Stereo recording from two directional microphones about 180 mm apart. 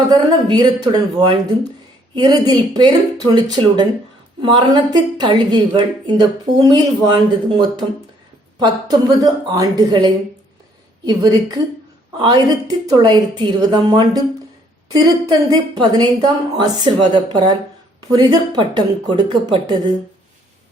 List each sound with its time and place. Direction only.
0.1 s a woman's voice: 20° right (ahead or behind)